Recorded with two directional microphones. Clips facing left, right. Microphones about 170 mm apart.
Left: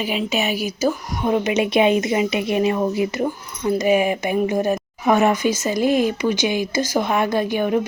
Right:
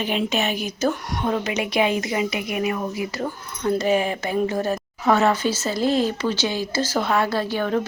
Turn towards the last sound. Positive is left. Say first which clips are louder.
# left 3 dB
turn(degrees=15)  # may be behind; listen again after turning